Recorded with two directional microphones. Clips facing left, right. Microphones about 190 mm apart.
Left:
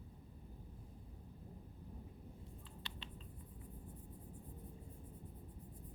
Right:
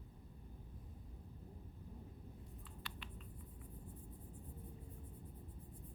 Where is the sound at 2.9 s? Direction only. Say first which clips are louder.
Even; 25° left (ahead or behind).